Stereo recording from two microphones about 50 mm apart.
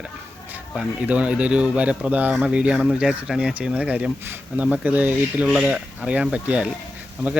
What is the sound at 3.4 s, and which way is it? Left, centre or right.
Speech, right.